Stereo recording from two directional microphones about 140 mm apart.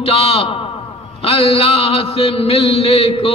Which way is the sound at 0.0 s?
45° left (ahead or behind).